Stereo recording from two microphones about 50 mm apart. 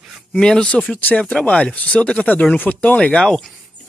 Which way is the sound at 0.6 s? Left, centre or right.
Left.